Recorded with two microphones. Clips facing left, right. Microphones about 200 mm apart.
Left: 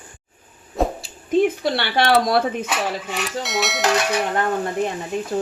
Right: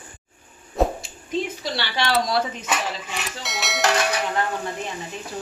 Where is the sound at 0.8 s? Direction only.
Centre (ahead or behind).